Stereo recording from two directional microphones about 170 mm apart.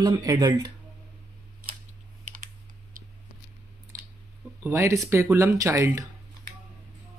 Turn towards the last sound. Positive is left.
turn(degrees=-15)  # may be behind; listen again after turning